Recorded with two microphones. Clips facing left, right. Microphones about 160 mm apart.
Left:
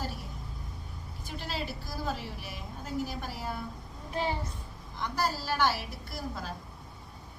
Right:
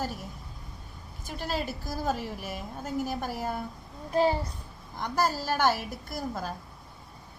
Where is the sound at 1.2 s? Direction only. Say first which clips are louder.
Right 5 dB; 45° right (ahead or behind).